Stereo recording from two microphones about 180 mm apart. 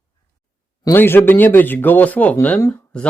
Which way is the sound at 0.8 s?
10° left (ahead or behind).